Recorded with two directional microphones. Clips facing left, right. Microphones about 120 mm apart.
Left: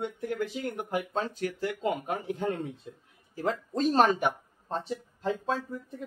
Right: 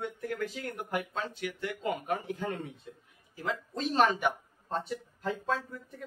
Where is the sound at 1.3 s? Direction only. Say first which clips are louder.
Left 5 dB; 40° left (ahead or behind).